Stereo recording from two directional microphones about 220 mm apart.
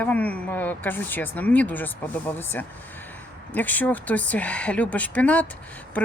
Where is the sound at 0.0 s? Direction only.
5° left (ahead or behind).